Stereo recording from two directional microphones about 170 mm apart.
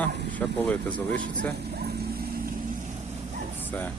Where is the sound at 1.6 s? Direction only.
70° right (ahead or behind).